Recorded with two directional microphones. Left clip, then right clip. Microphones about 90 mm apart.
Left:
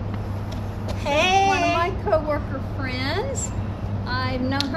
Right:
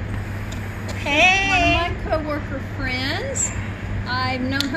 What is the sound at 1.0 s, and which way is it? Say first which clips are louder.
A woman's voice: right 2 dB; 35° left (ahead or behind).